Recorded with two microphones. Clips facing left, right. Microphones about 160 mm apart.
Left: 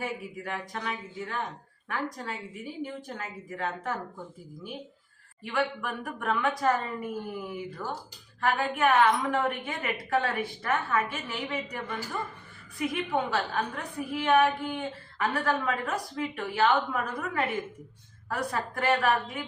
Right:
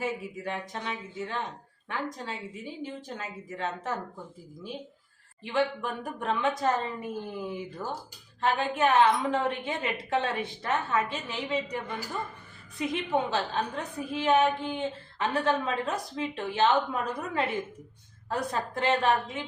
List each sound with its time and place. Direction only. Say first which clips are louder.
0.0 s a woman's voice: right 2 dB; 25° right (ahead or behind)
5.4 s a woman's voice: right 2 dB; 25° right (ahead or behind)